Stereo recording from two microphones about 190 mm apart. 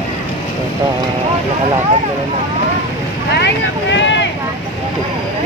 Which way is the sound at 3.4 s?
70° left (ahead or behind).